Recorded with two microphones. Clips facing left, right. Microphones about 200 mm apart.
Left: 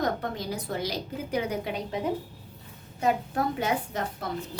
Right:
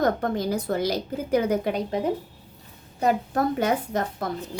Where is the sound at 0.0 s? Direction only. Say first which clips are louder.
Right 6 dB; 45° right (ahead or behind).